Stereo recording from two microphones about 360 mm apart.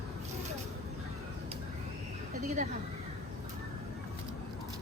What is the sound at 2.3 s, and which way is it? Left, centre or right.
Speech, centre.